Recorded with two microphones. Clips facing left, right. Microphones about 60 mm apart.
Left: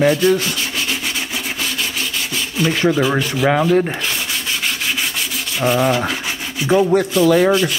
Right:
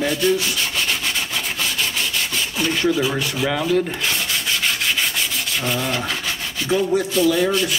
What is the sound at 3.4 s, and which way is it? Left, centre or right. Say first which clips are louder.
Speech: left 5 dB; left.